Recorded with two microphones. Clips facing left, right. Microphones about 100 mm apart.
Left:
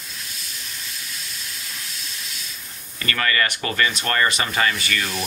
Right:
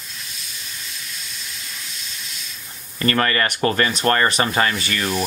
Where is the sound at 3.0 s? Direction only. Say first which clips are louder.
Right 4 dB; 35° right (ahead or behind).